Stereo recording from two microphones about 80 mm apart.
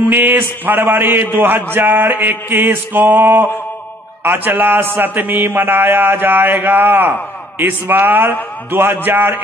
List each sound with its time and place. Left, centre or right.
0.1 s a man's voice: right